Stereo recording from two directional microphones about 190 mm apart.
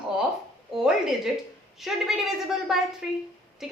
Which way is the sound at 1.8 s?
Centre (ahead or behind).